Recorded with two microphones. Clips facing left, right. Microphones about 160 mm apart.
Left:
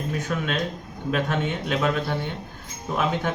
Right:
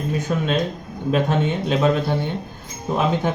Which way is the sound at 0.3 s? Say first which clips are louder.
Right 6 dB; 30° right (ahead or behind).